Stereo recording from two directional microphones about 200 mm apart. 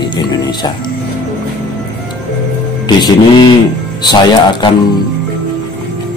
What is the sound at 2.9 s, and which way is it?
Speech, 20° left (ahead or behind).